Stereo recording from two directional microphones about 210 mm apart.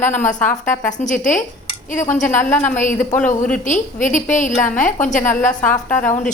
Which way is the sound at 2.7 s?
35° left (ahead or behind).